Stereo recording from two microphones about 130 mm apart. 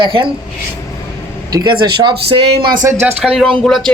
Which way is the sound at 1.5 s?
30° right (ahead or behind).